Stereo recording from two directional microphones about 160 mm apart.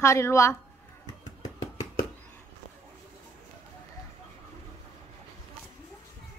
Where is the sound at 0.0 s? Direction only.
20° left (ahead or behind).